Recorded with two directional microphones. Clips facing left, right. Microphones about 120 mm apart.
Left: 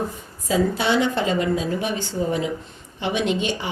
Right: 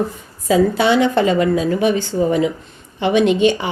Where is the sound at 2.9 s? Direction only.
70° right (ahead or behind).